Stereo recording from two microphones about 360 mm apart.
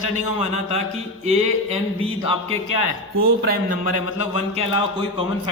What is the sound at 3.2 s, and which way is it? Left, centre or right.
Speech, right.